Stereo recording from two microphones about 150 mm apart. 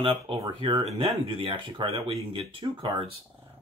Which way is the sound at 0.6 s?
35° right (ahead or behind).